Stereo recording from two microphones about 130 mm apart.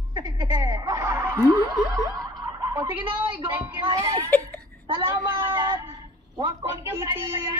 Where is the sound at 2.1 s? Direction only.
30° right (ahead or behind).